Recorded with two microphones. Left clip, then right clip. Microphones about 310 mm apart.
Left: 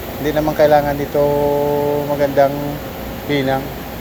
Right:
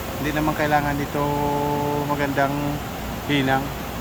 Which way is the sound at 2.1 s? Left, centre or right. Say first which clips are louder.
Left 8 dB; centre.